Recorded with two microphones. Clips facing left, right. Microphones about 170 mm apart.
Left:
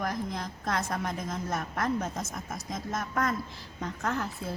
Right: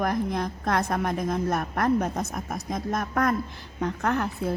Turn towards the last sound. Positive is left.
turn(degrees=-60)  # may be behind; listen again after turning